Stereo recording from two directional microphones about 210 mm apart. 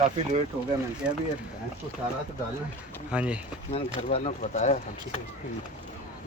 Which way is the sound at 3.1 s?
5° right (ahead or behind).